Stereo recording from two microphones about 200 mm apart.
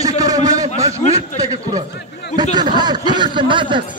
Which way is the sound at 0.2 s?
20° right (ahead or behind).